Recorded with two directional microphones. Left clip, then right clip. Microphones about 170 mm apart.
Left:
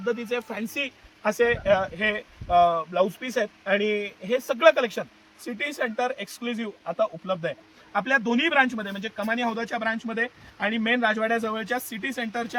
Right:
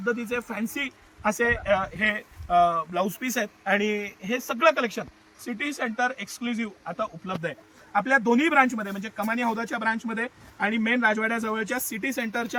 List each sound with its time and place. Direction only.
0.0 s speech: 40° left (ahead or behind); by 7.5 s 55° left (ahead or behind)
7.9 s speech: 40° left (ahead or behind); by 12.5 s 65° left (ahead or behind)